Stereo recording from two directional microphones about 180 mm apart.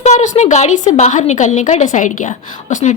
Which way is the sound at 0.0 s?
40° left (ahead or behind).